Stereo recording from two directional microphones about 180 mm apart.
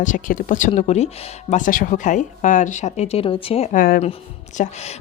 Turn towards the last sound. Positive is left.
turn(degrees=40)  # may be behind; listen again after turning